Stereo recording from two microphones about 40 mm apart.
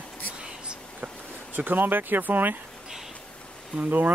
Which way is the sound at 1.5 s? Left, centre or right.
Right.